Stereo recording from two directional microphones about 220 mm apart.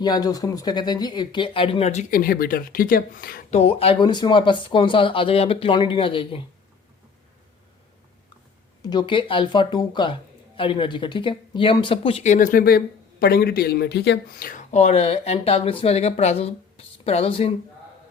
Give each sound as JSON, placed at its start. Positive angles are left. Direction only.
{"t": 0.0, "sound": "speech", "side_deg": 15}
{"t": 3.6, "sound": "speech", "side_deg": 25}
{"t": 8.8, "sound": "speech", "side_deg": 20}